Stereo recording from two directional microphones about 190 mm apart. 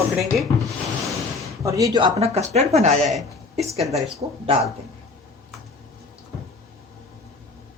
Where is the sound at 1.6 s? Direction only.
15° right (ahead or behind); by 3.0 s 35° right (ahead or behind).